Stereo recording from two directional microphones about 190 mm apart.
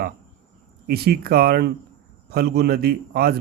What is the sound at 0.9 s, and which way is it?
A man's voice, 55° right (ahead or behind).